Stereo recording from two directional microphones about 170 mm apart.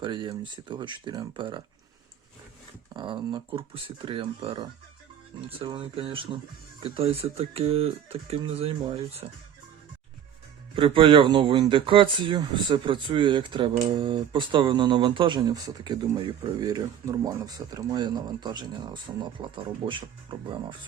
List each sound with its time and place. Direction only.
0.0 s speech: 30° right (ahead or behind)
2.9 s speech: 30° right (ahead or behind)
10.8 s speech: 30° right (ahead or behind)